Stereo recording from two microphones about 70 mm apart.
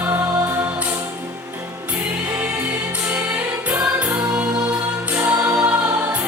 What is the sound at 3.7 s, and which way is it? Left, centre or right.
Music, right.